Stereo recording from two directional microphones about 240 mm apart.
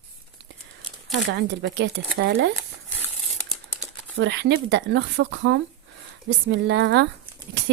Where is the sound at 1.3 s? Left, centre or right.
Right.